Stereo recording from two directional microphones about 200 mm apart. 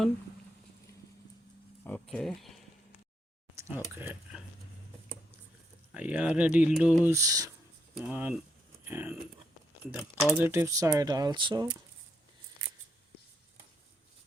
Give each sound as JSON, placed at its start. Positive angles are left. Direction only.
{"t": 1.8, "sound": "speech", "side_deg": 5}
{"t": 3.9, "sound": "speech", "side_deg": -10}
{"t": 5.9, "sound": "speech", "side_deg": -5}
{"t": 7.1, "sound": "speech", "side_deg": -15}
{"t": 7.9, "sound": "speech", "side_deg": -5}
{"t": 10.3, "sound": "speech", "side_deg": -10}